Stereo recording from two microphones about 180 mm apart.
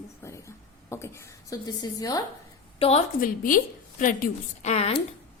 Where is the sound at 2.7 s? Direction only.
35° left (ahead or behind).